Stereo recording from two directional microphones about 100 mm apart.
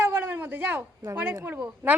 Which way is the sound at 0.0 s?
20° right (ahead or behind).